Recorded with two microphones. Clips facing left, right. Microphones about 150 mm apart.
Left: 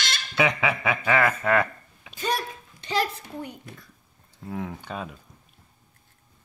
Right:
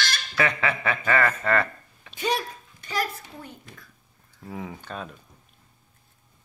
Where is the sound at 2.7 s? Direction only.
25° left (ahead or behind).